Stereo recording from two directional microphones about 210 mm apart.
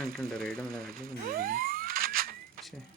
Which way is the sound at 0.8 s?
45° right (ahead or behind).